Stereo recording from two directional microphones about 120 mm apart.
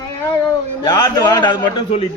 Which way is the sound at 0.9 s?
35° left (ahead or behind).